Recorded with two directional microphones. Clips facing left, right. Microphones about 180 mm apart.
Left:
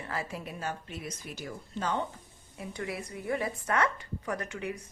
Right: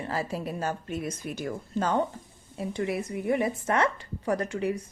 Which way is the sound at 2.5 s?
25° right (ahead or behind).